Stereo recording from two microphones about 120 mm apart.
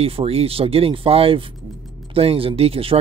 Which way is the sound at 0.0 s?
55° right (ahead or behind).